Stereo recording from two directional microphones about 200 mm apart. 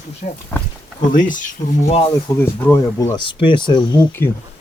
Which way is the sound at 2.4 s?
10° left (ahead or behind).